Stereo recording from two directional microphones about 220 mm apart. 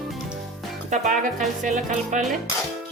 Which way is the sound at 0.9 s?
35° right (ahead or behind).